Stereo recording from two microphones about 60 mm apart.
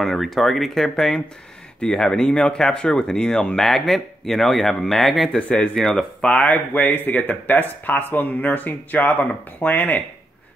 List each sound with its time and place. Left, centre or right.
0.0 s speech: centre
5.5 s speech: centre
6.4 s speech: left